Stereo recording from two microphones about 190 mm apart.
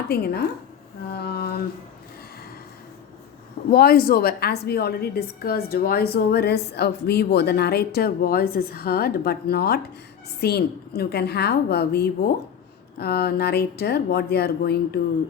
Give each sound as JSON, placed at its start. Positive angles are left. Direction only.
{"t": 0.1, "sound": "a woman's voice", "side_deg": 55}
{"t": 3.7, "sound": "a woman's voice", "side_deg": 55}